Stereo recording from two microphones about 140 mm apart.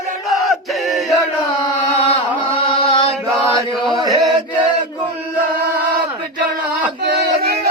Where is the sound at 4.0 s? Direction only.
30° right (ahead or behind).